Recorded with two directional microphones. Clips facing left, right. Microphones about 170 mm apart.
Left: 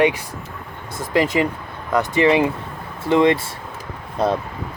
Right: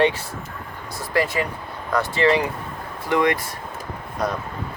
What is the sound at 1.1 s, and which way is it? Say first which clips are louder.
Speech: left 4 dB; 20° left (ahead or behind).